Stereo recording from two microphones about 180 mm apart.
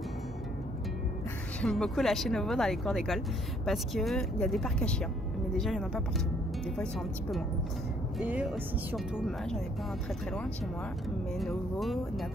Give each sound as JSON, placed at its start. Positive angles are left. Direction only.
{"t": 1.6, "sound": "speech", "side_deg": 5}